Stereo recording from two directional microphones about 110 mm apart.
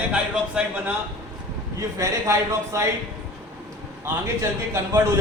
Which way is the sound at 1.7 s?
30° right (ahead or behind).